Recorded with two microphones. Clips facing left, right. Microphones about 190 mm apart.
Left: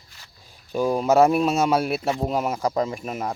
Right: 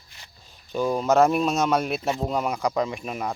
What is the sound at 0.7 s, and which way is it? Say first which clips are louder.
A man's voice: left 2 dB; 10° left (ahead or behind).